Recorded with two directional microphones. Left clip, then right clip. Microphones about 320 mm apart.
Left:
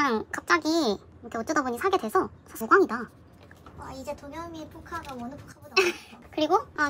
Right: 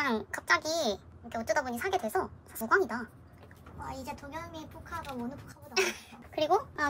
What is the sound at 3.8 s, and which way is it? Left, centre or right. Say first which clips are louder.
Speech: left 3 dB; centre.